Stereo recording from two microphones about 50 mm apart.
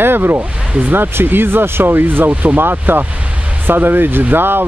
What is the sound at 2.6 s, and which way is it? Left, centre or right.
Speech, right.